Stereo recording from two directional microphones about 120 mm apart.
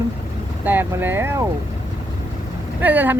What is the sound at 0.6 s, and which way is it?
Speech, 15° right (ahead or behind).